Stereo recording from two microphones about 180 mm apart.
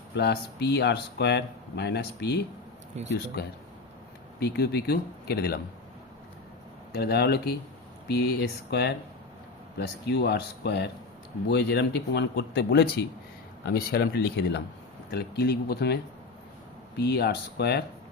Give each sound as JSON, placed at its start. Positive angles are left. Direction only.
{"t": 0.1, "sound": "speech", "side_deg": 70}
{"t": 4.4, "sound": "speech", "side_deg": 65}
{"t": 6.9, "sound": "speech", "side_deg": 65}
{"t": 13.7, "sound": "speech", "side_deg": 55}
{"t": 17.0, "sound": "speech", "side_deg": 65}